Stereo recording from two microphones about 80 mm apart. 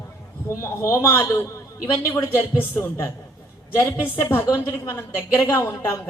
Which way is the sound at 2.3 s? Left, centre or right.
Left.